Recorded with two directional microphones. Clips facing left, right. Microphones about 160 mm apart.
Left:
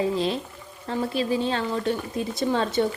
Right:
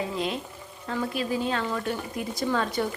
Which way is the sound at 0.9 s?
30° left (ahead or behind).